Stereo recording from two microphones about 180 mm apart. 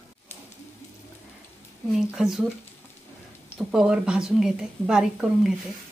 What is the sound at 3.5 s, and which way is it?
A woman's voice, 5° right (ahead or behind).